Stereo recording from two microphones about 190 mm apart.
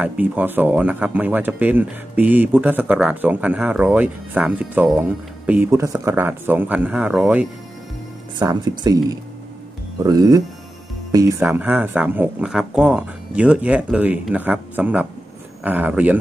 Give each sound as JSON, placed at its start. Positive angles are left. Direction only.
{"t": 0.0, "sound": "speech", "side_deg": -10}
{"t": 8.4, "sound": "speech", "side_deg": -20}